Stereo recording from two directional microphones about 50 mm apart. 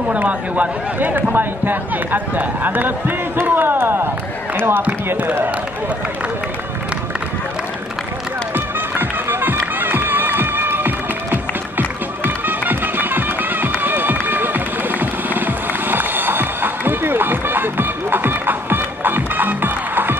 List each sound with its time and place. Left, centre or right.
0.1 s speech: right
8.5 s music: right